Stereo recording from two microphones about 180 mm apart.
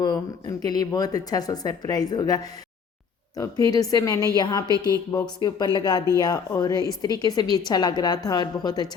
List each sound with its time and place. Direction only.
0.0 s a woman's voice: 20° left (ahead or behind)